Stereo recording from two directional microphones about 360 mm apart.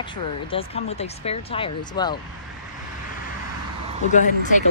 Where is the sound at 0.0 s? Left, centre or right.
Centre.